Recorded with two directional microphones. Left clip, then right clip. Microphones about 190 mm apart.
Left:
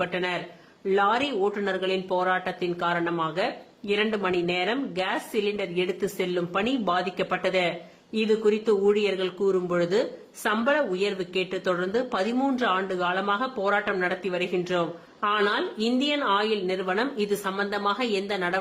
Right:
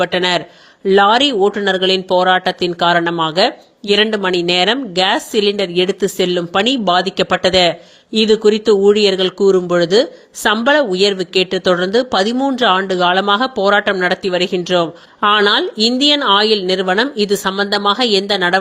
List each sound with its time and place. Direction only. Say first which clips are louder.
0.0 s speech: right 13 dB; 40° right (ahead or behind)